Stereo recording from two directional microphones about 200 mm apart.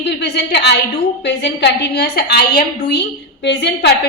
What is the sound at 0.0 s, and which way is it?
A woman's voice, 60° left (ahead or behind).